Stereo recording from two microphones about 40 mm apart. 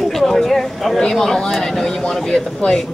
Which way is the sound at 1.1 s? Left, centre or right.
Centre.